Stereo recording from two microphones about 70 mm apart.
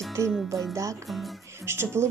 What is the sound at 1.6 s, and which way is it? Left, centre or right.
Speech, right.